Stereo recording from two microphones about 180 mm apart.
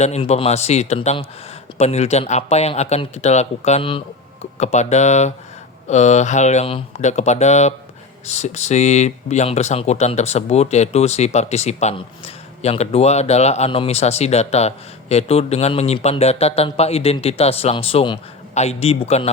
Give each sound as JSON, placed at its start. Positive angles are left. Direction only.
{"t": 0.0, "sound": "speech", "side_deg": 35}